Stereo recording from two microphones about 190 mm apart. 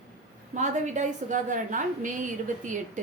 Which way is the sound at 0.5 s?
40° right (ahead or behind).